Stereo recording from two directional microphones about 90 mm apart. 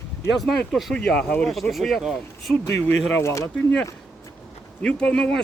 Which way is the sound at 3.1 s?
30° left (ahead or behind).